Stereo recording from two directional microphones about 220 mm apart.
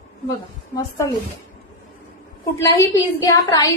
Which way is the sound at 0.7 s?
15° left (ahead or behind).